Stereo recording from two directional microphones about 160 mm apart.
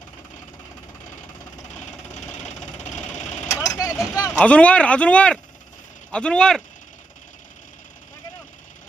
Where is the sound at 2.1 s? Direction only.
45° left (ahead or behind).